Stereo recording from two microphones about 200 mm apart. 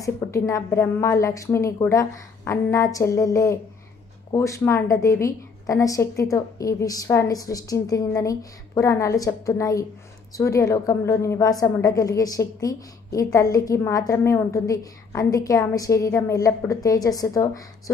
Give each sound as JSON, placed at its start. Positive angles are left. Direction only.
{"t": 0.0, "sound": "a woman's voice", "side_deg": 15}